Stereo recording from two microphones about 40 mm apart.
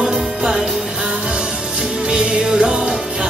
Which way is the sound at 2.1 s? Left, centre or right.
Right.